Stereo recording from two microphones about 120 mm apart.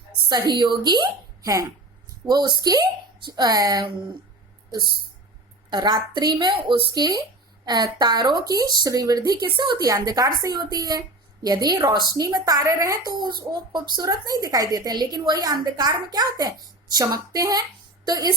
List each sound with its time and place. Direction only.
0.3 s speech: 35° right (ahead or behind)
5.7 s a woman's voice: 35° right (ahead or behind)